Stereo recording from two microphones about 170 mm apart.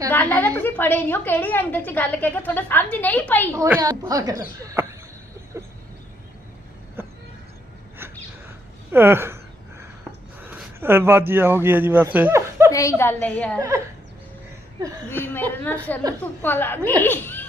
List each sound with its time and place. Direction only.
0.1 s a woman's voice: 10° left (ahead or behind)
3.6 s speech: 20° right (ahead or behind)
8.9 s a sound: 15° right (ahead or behind)
10.4 s speech: 10° right (ahead or behind)
12.7 s a woman's voice: 20° left (ahead or behind)
13.6 s speech: 20° right (ahead or behind)
15.1 s a woman's voice: 10° left (ahead or behind)